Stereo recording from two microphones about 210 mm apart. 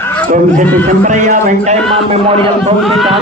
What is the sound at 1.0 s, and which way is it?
A man's voice, 35° right (ahead or behind).